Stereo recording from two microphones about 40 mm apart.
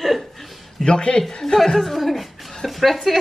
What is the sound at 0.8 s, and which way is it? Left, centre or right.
Speech, left.